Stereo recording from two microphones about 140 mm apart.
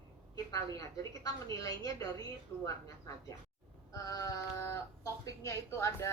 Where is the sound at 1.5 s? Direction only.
25° left (ahead or behind).